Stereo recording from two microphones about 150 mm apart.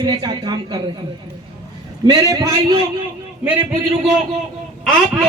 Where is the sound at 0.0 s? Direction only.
25° right (ahead or behind).